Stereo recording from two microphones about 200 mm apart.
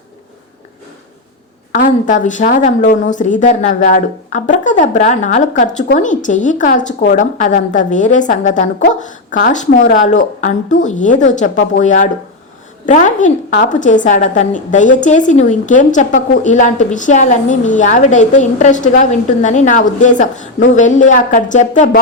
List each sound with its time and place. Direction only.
1.7 s a woman's voice: 40° left (ahead or behind)